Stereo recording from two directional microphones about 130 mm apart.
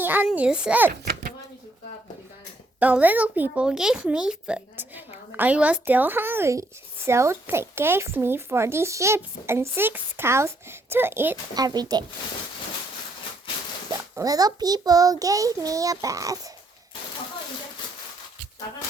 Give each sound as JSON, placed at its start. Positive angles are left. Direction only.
{"t": 0.0, "sound": "a child's voice", "side_deg": -15}
{"t": 2.7, "sound": "a child's voice", "side_deg": -10}
{"t": 11.5, "sound": "speech", "side_deg": -30}
{"t": 14.2, "sound": "a child's voice", "side_deg": -30}